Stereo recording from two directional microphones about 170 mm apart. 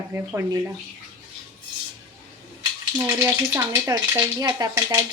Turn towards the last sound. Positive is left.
turn(degrees=-20)  # may be behind; listen again after turning